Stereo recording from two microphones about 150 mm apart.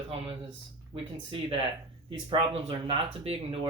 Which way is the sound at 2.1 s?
35° right (ahead or behind).